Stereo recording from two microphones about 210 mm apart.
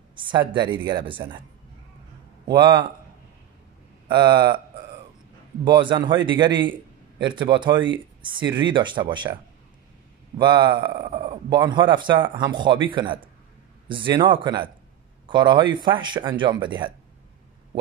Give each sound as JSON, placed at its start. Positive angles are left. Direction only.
{"t": 0.2, "sound": "speech", "side_deg": -25}
{"t": 2.4, "sound": "speech", "side_deg": -20}
{"t": 4.1, "sound": "speech", "side_deg": -20}
{"t": 5.8, "sound": "a man's voice", "side_deg": -20}